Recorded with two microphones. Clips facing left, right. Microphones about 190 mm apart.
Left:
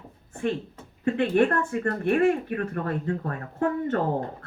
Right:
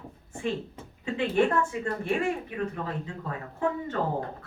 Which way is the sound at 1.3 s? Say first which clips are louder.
Right 1 dB; 55° left (ahead or behind).